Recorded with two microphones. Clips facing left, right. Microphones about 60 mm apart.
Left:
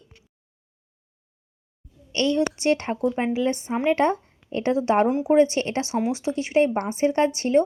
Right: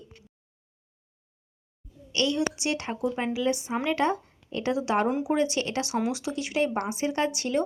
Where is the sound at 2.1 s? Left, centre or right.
Left.